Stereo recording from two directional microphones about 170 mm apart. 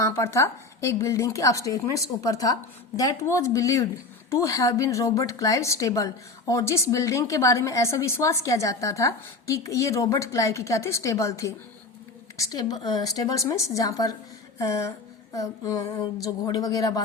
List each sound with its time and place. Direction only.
0.0 s a woman's voice: 15° left (ahead or behind)